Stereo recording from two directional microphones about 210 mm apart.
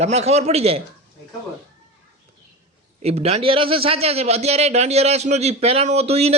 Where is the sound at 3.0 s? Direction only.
30° right (ahead or behind).